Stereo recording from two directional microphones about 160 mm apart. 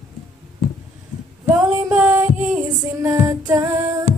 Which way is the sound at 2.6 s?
20° right (ahead or behind).